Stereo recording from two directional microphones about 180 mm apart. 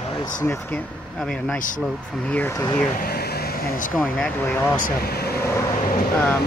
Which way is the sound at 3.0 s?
60° left (ahead or behind).